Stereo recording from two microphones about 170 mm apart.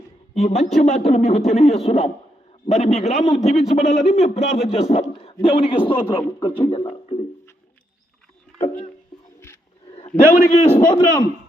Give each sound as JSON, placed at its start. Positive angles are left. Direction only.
{"t": 0.3, "sound": "a man's voice", "side_deg": 40}
{"t": 8.5, "sound": "music", "side_deg": 35}
{"t": 10.1, "sound": "a man's voice", "side_deg": 5}
{"t": 10.5, "sound": "a man's voice", "side_deg": 40}
{"t": 10.8, "sound": "a man's voice", "side_deg": 25}